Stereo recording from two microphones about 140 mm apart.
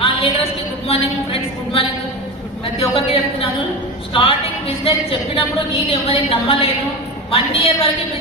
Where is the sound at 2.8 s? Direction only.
40° left (ahead or behind).